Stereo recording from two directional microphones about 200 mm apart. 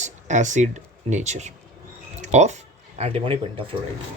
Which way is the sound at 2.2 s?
35° right (ahead or behind).